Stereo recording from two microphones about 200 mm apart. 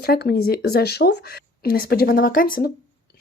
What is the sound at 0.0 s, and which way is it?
Speech, 55° left (ahead or behind).